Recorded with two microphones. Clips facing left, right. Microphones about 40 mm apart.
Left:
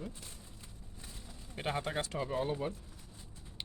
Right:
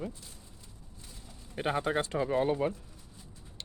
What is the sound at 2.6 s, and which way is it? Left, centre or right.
Speech, right.